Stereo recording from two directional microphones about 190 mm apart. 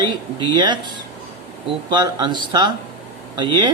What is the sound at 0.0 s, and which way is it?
Speech, 25° right (ahead or behind).